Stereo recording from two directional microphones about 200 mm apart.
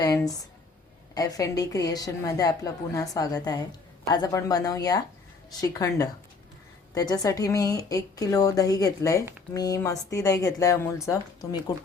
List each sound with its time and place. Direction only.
0.0 s a woman's voice: 20° left (ahead or behind)